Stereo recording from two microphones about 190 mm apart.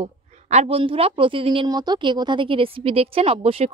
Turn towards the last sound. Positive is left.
turn(degrees=-30)  # may be behind; listen again after turning